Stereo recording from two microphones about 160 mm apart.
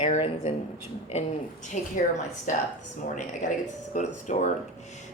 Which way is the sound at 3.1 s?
50° left (ahead or behind).